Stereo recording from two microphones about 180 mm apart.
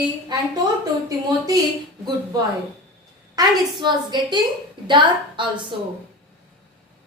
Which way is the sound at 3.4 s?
25° right (ahead or behind).